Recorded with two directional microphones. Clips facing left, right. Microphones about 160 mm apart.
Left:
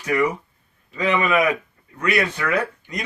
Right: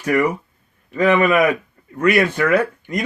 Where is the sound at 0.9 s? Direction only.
55° right (ahead or behind).